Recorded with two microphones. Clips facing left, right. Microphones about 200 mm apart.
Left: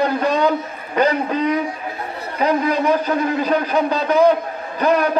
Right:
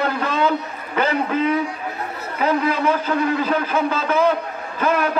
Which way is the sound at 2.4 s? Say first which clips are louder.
Left 2 dB; 15° left (ahead or behind).